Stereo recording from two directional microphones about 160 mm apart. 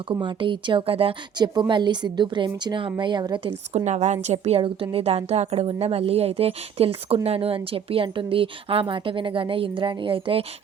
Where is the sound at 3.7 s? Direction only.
45° right (ahead or behind).